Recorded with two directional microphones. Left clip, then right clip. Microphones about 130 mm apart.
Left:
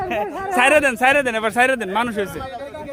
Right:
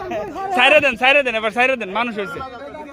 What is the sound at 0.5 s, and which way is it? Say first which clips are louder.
Speech: right 2 dB; 70° left (ahead or behind).